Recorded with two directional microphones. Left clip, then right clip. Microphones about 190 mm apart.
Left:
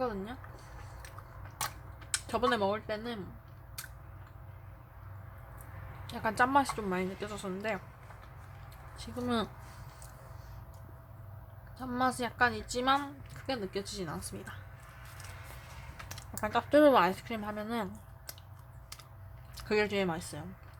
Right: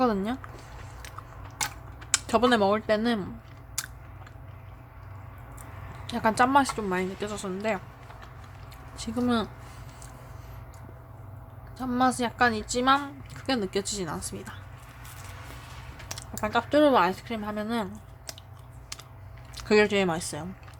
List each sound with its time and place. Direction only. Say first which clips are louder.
0.0 s a sound: right 10 dB; 25° right (ahead or behind)
2.0 s speech: right 8 dB; 10° right (ahead or behind)
3.8 s biting: right 10 dB; 20° right (ahead or behind)
6.1 s a woman's voice: right 6 dB; 10° right (ahead or behind)
9.0 s speech: right 6 dB; 10° right (ahead or behind)
11.8 s a woman's voice: right 7 dB; 5° right (ahead or behind)
16.0 s speech: right 5 dB; 5° right (ahead or behind)
18.3 s a sound: right 8 dB; 5° right (ahead or behind)
19.5 s speech: right 8 dB; 10° right (ahead or behind)